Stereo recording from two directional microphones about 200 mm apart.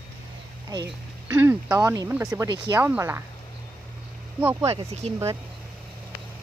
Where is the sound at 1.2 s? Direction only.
10° right (ahead or behind).